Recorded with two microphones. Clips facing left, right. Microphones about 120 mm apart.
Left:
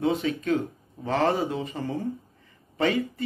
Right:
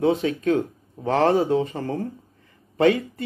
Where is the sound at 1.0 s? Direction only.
45° right (ahead or behind).